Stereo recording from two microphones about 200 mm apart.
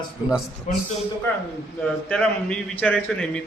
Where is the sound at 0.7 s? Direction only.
40° left (ahead or behind).